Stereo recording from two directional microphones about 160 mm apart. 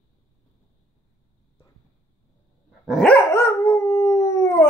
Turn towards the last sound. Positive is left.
turn(degrees=20)  # may be behind; listen again after turning